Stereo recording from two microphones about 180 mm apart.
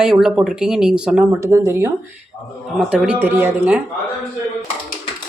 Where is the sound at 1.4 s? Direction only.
15° right (ahead or behind).